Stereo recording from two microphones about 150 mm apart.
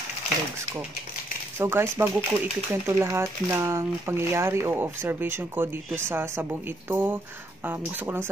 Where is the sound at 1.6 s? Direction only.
15° right (ahead or behind).